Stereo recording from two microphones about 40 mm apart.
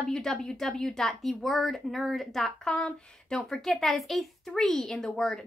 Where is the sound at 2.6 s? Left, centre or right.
Left.